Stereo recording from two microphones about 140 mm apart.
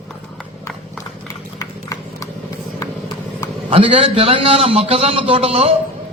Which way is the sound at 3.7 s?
40° right (ahead or behind).